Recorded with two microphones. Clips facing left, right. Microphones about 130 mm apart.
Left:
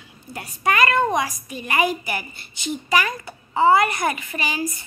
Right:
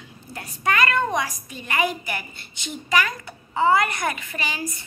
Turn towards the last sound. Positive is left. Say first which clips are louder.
# left 4 dB
turn(degrees=10)  # may be behind; listen again after turning